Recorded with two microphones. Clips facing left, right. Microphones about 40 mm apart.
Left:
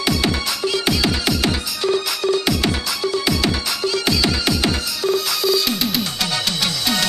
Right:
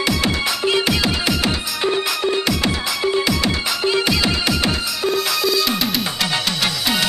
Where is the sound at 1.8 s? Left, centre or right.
Right.